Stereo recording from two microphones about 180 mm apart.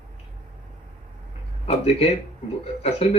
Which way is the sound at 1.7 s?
35° left (ahead or behind).